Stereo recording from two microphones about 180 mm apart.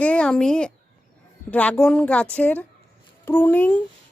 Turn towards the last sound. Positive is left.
turn(degrees=10)  # may be behind; listen again after turning